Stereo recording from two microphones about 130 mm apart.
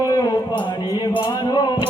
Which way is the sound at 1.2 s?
35° left (ahead or behind).